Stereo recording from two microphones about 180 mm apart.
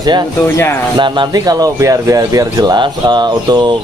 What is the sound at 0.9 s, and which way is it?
Speech, 25° right (ahead or behind).